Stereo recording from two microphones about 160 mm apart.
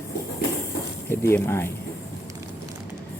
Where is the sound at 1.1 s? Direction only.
15° left (ahead or behind).